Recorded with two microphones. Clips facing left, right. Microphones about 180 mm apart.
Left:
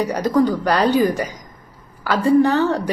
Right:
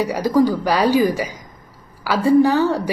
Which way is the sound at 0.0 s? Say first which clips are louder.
Right 1 dB; 10° right (ahead or behind).